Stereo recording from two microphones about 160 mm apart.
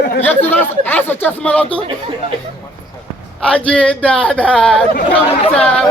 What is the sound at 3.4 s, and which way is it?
Speech, 5° left (ahead or behind).